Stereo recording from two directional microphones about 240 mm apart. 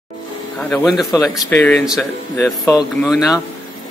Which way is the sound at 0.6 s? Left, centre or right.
Centre.